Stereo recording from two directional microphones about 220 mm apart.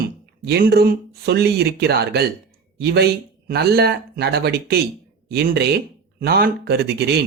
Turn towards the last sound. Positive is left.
turn(degrees=-50)  # may be behind; listen again after turning